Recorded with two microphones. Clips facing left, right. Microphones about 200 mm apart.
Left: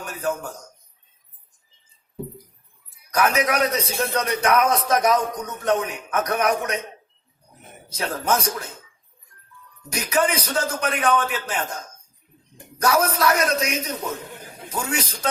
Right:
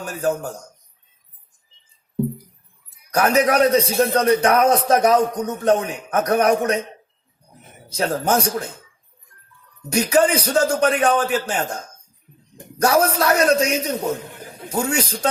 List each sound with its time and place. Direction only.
0.0 s a man's voice: 30° right (ahead or behind)
3.2 s a man's voice: 35° right (ahead or behind)
7.9 s a man's voice: 30° right (ahead or behind)
9.9 s a man's voice: 30° right (ahead or behind)
12.8 s a man's voice: 30° right (ahead or behind)